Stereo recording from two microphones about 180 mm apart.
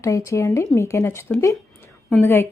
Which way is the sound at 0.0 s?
15° left (ahead or behind).